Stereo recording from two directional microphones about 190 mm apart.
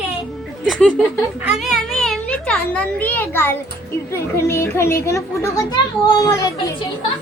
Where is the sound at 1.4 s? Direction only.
5° right (ahead or behind).